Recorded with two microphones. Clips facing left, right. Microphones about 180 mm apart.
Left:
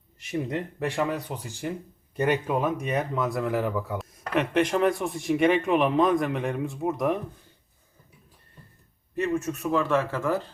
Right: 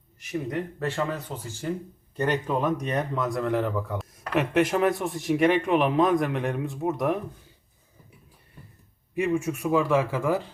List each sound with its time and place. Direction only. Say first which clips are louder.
0.2 s speech: left 1 dB; 25° left (ahead or behind)
0.8 s speech: left 4 dB; 15° left (ahead or behind); by 7.2 s centre (ahead or behind)
9.1 s a man's voice: right 2 dB; 10° right (ahead or behind)